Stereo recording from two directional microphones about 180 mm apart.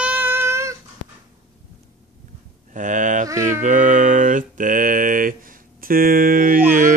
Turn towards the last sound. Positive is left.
turn(degrees=-50)  # may be behind; listen again after turning